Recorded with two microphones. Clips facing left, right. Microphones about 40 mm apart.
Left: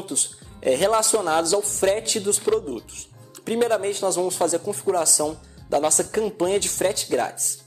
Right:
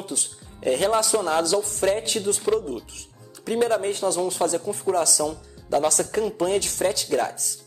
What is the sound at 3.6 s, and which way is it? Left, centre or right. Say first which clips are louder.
Speech: left 1 dB; left.